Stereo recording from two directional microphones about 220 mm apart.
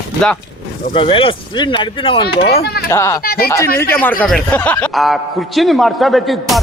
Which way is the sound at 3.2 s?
45° left (ahead or behind).